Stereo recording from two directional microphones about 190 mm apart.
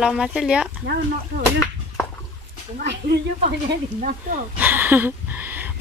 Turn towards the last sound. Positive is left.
turn(degrees=-10)  # may be behind; listen again after turning